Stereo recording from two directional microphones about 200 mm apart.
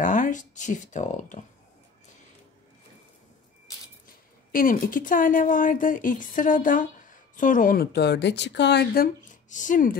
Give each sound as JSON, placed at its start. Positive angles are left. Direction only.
{"t": 0.0, "sound": "speech", "side_deg": 40}
{"t": 4.5, "sound": "speech", "side_deg": 45}